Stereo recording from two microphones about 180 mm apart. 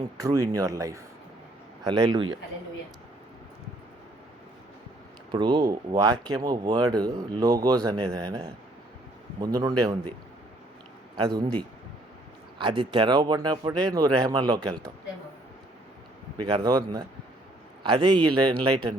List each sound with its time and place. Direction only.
0.2 s speech: 20° right (ahead or behind)
5.3 s speech: 25° right (ahead or behind)
11.3 s speech: 20° right (ahead or behind)
16.5 s speech: 20° right (ahead or behind)